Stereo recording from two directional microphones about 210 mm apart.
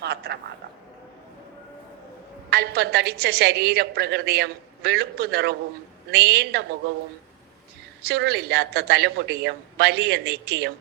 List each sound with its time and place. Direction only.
0.0 s a sound: 50° right (ahead or behind)
2.5 s a woman's voice: 50° right (ahead or behind)
8.0 s a woman's voice: 50° right (ahead or behind)